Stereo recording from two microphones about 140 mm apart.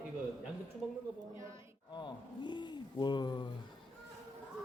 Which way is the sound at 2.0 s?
35° left (ahead or behind).